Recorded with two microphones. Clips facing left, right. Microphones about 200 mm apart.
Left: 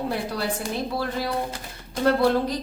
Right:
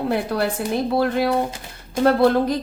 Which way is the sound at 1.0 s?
60° right (ahead or behind).